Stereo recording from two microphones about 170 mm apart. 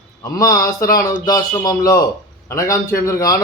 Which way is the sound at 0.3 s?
20° left (ahead or behind).